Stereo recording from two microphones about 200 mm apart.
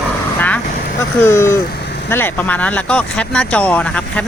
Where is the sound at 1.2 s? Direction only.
15° left (ahead or behind).